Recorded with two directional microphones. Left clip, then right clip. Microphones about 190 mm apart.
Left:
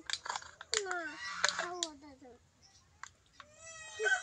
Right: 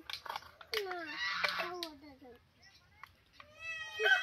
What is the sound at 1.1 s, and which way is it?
Fowl, 60° left (ahead or behind).